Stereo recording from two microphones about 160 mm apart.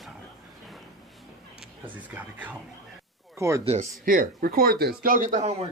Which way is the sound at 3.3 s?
20° right (ahead or behind).